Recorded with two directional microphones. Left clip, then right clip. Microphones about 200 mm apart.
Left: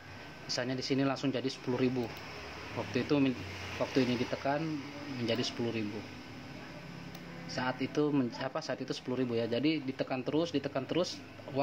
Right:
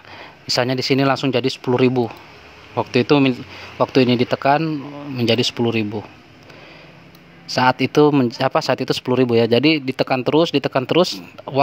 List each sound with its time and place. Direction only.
0.5 s speech: 55° right (ahead or behind)
7.4 s speech: 55° right (ahead or behind)